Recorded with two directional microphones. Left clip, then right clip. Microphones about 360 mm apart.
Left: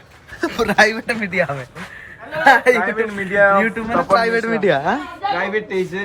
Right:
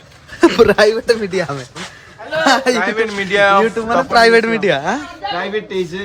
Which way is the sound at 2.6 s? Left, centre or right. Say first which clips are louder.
Even; centre.